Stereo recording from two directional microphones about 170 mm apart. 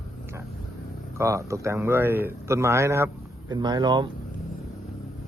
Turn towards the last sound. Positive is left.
turn(degrees=-25)  # may be behind; listen again after turning